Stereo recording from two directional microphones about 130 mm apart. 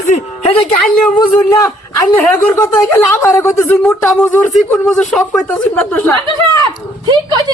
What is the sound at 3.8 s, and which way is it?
Speech, centre (ahead or behind).